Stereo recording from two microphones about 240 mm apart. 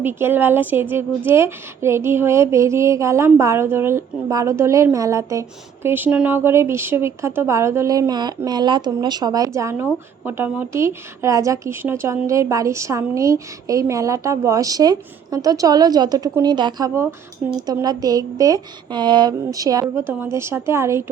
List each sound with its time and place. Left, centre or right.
0.0 s a woman's voice: centre